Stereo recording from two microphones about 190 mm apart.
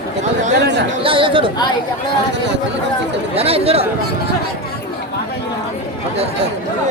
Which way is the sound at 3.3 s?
30° right (ahead or behind).